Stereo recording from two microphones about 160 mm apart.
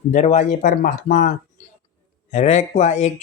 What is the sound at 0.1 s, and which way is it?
Speech, 50° left (ahead or behind).